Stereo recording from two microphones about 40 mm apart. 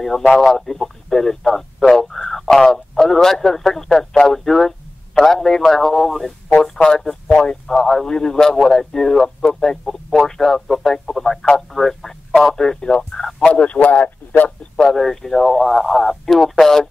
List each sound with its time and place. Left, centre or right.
0.3 s a man's voice: centre
13.1 s speech: centre
13.5 s a man's voice: left
13.9 s speech: left
14.8 s speech: centre